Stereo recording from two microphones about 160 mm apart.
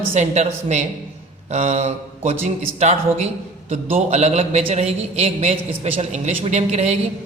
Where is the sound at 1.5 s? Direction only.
45° right (ahead or behind).